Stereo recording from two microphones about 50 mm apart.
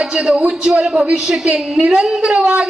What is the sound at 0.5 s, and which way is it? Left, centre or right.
A man's voice, centre.